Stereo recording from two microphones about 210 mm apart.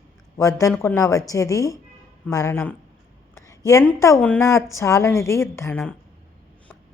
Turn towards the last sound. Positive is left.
turn(degrees=5)  # may be behind; listen again after turning